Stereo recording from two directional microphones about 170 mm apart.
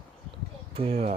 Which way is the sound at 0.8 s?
35° right (ahead or behind).